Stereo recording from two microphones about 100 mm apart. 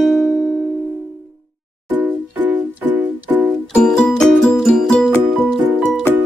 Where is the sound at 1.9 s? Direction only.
20° right (ahead or behind).